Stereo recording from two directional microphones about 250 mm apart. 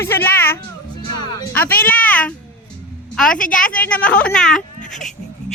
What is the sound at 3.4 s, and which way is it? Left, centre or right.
Speech, left.